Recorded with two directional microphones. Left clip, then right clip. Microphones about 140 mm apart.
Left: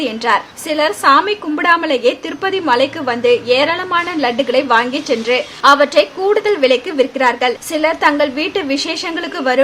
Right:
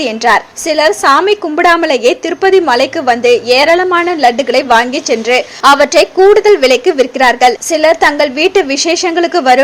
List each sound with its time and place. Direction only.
0.0 s a woman's voice: 40° right (ahead or behind)